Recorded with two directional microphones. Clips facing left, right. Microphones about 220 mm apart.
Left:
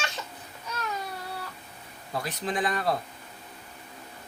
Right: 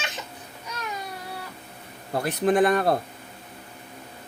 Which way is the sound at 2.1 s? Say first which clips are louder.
Right 10 dB; 60° right (ahead or behind).